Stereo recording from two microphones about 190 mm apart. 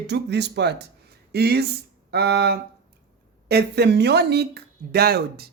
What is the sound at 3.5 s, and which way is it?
Speech, 60° right (ahead or behind).